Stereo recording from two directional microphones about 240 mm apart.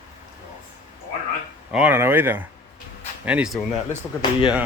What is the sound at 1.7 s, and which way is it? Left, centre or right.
Speech, centre.